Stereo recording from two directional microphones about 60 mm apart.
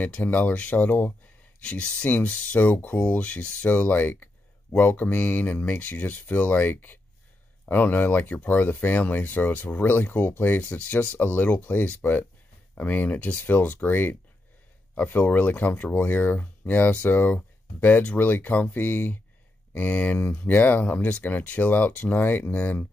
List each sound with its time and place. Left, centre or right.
0.0 s speech: left
1.6 s speech: left
3.0 s speech: left